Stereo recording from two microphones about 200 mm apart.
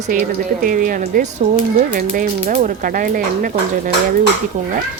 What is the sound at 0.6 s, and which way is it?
Speech, 40° right (ahead or behind).